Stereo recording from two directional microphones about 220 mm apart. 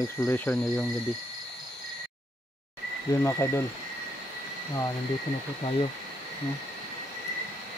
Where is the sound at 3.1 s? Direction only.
10° left (ahead or behind).